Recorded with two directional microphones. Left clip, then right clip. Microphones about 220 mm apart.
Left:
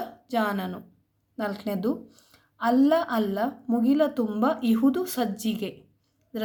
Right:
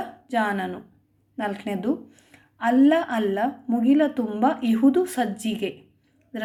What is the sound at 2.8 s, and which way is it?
A woman's voice, 50° left (ahead or behind).